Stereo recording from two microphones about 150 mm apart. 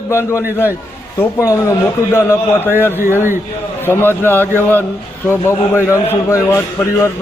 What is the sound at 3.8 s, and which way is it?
A man's voice, 15° left (ahead or behind).